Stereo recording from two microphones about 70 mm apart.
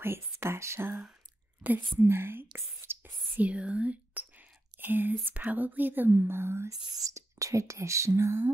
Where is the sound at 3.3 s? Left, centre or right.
Centre; by 6.6 s right.